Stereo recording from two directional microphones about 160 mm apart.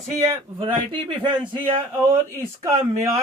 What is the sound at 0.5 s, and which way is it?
Speech, 30° right (ahead or behind).